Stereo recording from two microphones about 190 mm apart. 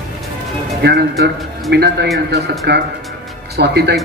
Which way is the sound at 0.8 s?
60° right (ahead or behind).